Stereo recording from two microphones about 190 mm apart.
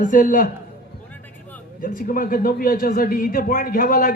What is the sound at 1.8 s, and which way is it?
A man's voice, 50° left (ahead or behind).